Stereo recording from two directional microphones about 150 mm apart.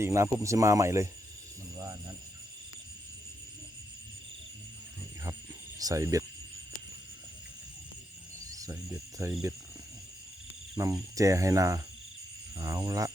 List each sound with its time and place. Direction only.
0.0 s speech: 20° right (ahead or behind)
5.8 s speech: 20° right (ahead or behind)
8.4 s cricket: 25° right (ahead or behind)
8.9 s speech: 25° right (ahead or behind)
10.8 s speech: 25° right (ahead or behind)